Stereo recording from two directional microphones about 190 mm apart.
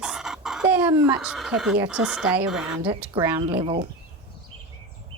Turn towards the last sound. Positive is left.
turn(degrees=-25)  # may be behind; listen again after turning